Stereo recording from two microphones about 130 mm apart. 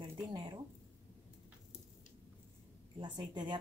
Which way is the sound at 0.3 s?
35° right (ahead or behind).